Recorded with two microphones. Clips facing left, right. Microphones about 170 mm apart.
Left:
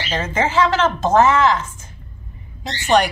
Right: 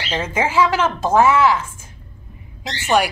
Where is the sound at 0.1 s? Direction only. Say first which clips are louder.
Even; 10° right (ahead or behind).